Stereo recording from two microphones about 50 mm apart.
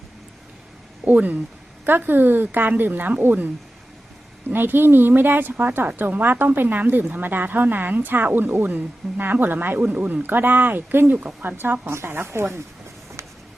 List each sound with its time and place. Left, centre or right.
1.0 s a woman's voice: right
4.5 s a woman's voice: right
11.4 s speech: right